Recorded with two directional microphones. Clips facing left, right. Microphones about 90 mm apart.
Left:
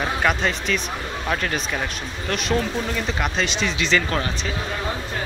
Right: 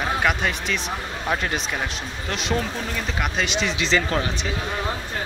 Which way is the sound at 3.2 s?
10° right (ahead or behind).